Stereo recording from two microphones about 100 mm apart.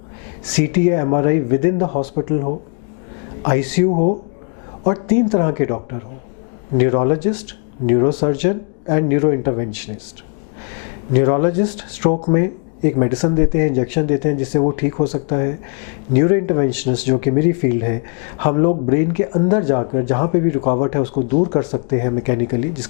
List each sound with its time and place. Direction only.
0.5 s speech: 15° left (ahead or behind)
11.1 s speech: 15° left (ahead or behind)